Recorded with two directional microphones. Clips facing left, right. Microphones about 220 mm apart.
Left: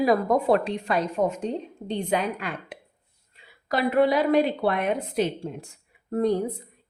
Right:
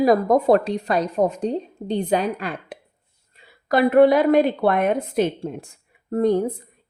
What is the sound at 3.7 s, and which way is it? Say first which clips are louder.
A woman's voice: right 7 dB; 50° right (ahead or behind).